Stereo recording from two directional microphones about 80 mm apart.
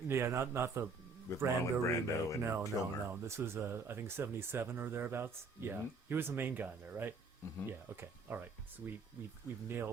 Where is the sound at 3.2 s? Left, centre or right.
Right.